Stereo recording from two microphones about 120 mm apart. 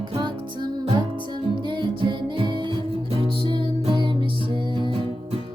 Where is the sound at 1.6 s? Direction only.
40° right (ahead or behind).